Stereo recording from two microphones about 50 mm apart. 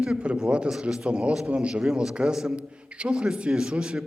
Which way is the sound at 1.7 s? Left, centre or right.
Centre.